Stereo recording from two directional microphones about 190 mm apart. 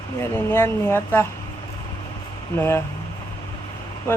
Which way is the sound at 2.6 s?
10° left (ahead or behind).